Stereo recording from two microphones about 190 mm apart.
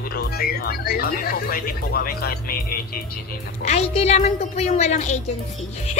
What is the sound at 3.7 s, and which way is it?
A woman's voice, 35° left (ahead or behind).